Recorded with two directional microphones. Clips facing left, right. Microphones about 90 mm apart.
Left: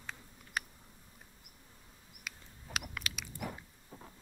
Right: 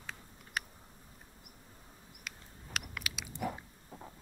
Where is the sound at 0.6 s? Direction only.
Centre (ahead or behind).